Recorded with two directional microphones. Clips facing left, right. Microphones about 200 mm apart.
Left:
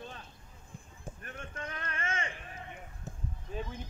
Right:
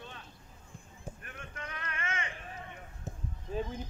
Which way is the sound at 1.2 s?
40° left (ahead or behind).